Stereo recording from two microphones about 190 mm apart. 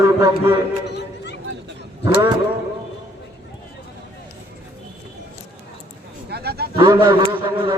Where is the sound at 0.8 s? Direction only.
65° left (ahead or behind).